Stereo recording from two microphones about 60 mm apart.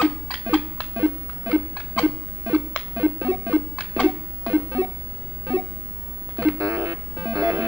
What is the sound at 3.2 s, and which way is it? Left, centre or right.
Music, right.